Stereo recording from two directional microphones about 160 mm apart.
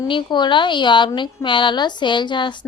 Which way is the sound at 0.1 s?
30° left (ahead or behind).